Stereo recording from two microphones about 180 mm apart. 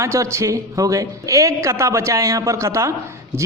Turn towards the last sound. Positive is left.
turn(degrees=-15)  # may be behind; listen again after turning